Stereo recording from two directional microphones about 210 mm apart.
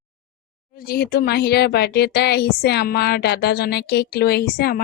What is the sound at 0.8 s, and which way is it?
Speech, 45° left (ahead or behind).